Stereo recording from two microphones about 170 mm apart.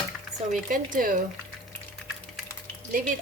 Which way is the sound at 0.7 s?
55° right (ahead or behind).